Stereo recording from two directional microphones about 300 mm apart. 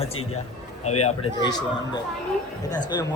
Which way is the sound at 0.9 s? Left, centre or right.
Left.